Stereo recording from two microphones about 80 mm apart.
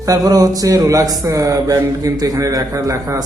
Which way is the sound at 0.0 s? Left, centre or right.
Right.